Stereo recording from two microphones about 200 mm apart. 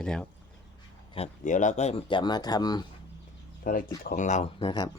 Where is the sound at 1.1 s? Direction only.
35° left (ahead or behind).